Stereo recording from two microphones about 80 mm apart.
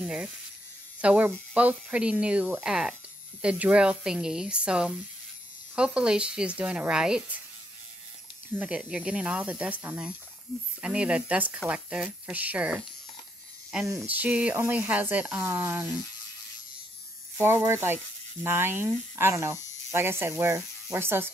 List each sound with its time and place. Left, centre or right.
0.0 s speech: centre
8.5 s speech: centre
15.4 s speech: right
17.4 s speech: right